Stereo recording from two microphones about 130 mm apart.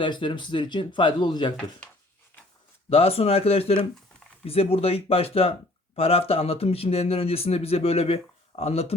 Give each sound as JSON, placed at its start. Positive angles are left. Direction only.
{"t": 0.0, "sound": "speech", "side_deg": 40}
{"t": 2.9, "sound": "speech", "side_deg": 50}